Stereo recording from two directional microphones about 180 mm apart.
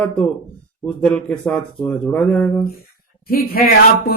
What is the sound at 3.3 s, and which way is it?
Speech, 55° left (ahead or behind).